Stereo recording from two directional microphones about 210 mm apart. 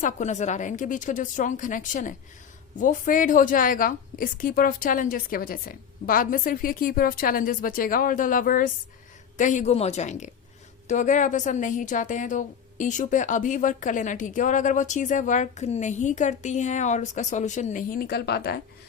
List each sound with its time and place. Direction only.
0.0 s a woman's voice: 35° left (ahead or behind)